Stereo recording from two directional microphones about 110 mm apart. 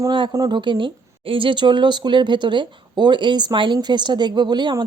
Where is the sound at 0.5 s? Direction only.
45° right (ahead or behind).